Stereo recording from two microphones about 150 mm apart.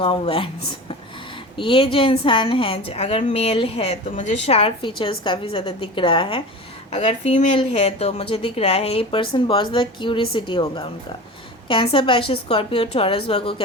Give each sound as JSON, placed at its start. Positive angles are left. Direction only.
{"t": 0.0, "sound": "a woman's voice", "side_deg": 40}
{"t": 6.9, "sound": "a woman's voice", "side_deg": 45}